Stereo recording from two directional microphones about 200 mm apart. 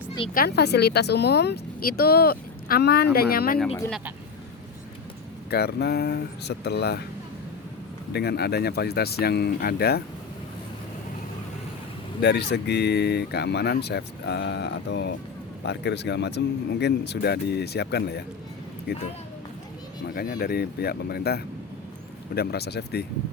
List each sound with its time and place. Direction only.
0.3 s speech: 55° left (ahead or behind)
5.5 s speech: 55° left (ahead or behind)
8.1 s speech: 55° left (ahead or behind)
12.2 s speech: 60° left (ahead or behind)
20.1 s speech: 45° left (ahead or behind)